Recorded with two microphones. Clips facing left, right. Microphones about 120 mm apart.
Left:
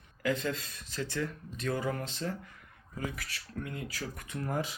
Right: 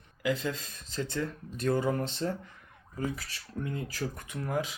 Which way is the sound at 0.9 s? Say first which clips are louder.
Right 2 dB; 25° right (ahead or behind).